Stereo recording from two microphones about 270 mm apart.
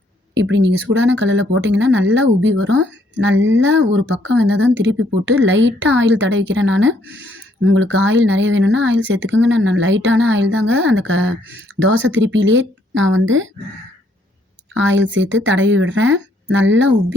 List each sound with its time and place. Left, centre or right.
0.3 s speech: right
14.7 s speech: right